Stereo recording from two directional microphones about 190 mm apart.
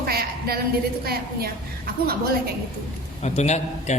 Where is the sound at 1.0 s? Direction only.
55° right (ahead or behind).